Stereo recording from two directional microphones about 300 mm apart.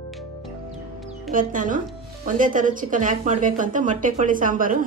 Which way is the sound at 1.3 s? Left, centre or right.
Right.